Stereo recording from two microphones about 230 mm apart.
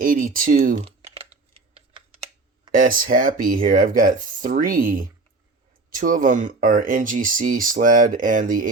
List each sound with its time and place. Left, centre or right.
0.0 s speech: right
0.9 s typing: right
2.7 s speech: right